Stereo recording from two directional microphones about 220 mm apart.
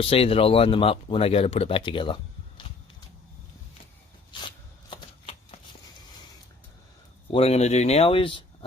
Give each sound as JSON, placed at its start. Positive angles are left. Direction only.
{"t": 0.0, "sound": "speech", "side_deg": 25}
{"t": 4.3, "sound": "shuffling cards", "side_deg": 20}
{"t": 7.3, "sound": "speech", "side_deg": 25}